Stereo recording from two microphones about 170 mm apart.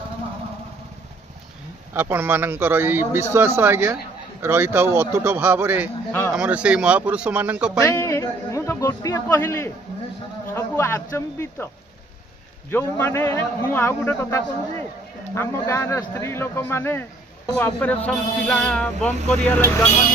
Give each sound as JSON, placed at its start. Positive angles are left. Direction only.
{"t": 2.0, "sound": "a man's voice", "side_deg": -10}
{"t": 7.8, "sound": "a man's voice", "side_deg": 15}
{"t": 12.7, "sound": "speech", "side_deg": 10}